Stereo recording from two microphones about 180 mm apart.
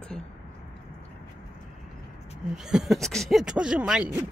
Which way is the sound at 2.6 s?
5° right (ahead or behind).